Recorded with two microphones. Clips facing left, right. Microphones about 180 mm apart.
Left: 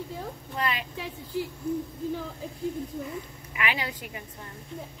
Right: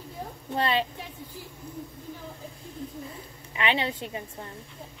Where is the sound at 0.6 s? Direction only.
30° right (ahead or behind).